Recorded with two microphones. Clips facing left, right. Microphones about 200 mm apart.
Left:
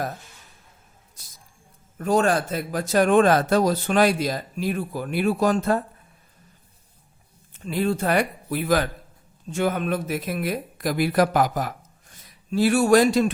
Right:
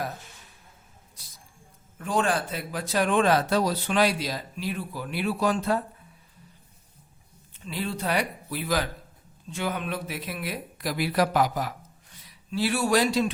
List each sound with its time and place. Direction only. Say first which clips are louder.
2.0 s speech: left 5 dB; 40° left (ahead or behind)
7.5 s speech: left 8 dB; 50° left (ahead or behind)